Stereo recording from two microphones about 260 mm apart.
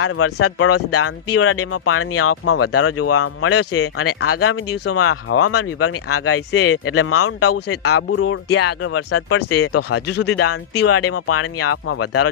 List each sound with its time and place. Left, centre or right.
0.0 s speech: left